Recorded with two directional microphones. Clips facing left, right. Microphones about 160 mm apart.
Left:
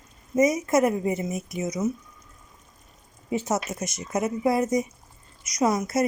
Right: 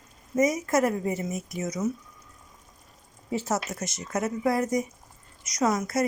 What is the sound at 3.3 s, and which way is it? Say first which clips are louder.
A woman's voice: left 2 dB; 20° left (ahead or behind).